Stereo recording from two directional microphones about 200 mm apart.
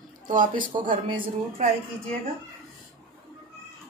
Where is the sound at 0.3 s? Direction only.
45° right (ahead or behind).